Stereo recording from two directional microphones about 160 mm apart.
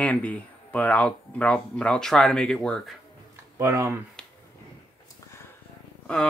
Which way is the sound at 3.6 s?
15° right (ahead or behind).